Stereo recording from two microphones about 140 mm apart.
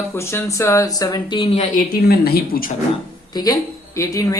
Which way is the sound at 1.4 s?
45° left (ahead or behind).